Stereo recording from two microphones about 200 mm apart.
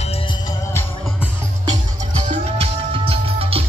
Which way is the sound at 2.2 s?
30° right (ahead or behind).